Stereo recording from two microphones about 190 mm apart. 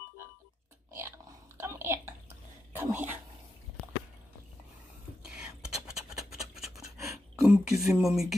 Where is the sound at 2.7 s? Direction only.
10° right (ahead or behind).